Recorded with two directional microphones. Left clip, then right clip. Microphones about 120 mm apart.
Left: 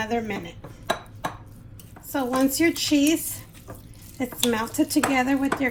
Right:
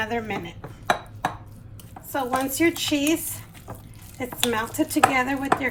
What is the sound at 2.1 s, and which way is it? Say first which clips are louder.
A woman's voice: left 1 dB; 45° left (ahead or behind).